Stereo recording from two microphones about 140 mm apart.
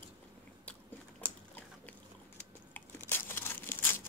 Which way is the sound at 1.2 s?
10° left (ahead or behind).